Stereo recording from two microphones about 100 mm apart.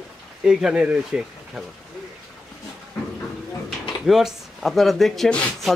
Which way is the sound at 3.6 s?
5° right (ahead or behind).